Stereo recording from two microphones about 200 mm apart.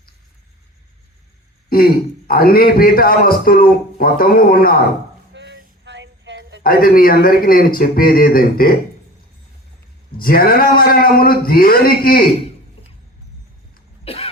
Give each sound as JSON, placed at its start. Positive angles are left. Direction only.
{"t": 1.7, "sound": "a man's voice", "side_deg": 50}
{"t": 5.3, "sound": "a sound", "side_deg": -60}
{"t": 6.6, "sound": "a man's voice", "side_deg": 45}
{"t": 10.1, "sound": "a man's voice", "side_deg": 45}
{"t": 14.0, "sound": "cough", "side_deg": 30}